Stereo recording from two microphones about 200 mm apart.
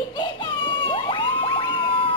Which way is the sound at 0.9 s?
25° left (ahead or behind).